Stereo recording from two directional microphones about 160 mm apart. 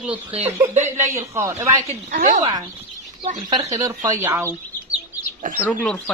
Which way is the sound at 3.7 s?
20° right (ahead or behind).